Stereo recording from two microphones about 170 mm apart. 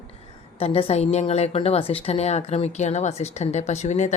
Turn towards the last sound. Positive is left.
turn(degrees=40)  # may be behind; listen again after turning